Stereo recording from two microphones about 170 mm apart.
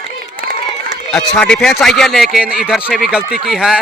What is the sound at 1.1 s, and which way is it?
Speech, 5° left (ahead or behind).